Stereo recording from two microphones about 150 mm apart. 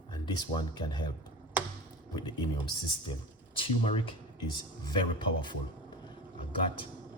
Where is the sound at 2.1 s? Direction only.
30° left (ahead or behind).